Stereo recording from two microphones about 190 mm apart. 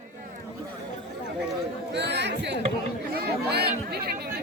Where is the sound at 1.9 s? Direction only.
65° right (ahead or behind).